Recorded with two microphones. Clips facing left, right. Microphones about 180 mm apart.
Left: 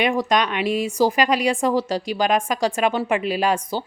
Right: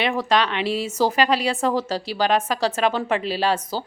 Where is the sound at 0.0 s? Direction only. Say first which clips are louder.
Left 1 dB; 15° left (ahead or behind).